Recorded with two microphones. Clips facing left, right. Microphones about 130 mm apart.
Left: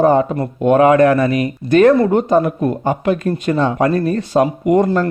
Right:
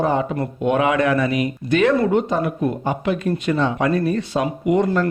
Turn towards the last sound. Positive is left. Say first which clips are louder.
# left 4 dB
turn(degrees=40)  # may be behind; listen again after turning